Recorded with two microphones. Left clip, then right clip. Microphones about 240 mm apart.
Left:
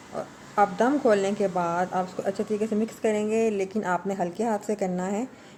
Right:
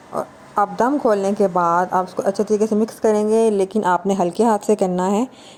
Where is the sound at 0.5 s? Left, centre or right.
Right.